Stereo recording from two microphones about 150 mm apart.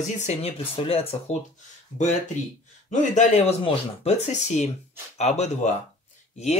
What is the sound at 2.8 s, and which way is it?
Speech, 50° left (ahead or behind).